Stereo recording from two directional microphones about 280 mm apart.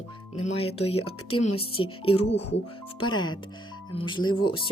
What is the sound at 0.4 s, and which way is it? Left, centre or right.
Speech, left.